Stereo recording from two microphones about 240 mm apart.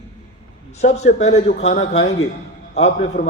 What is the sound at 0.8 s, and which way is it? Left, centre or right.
A man's voice, left.